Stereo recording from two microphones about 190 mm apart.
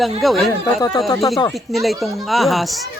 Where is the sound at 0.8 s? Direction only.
20° left (ahead or behind).